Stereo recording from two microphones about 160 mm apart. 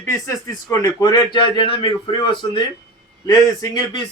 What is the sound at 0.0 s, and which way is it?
Speech, 20° left (ahead or behind).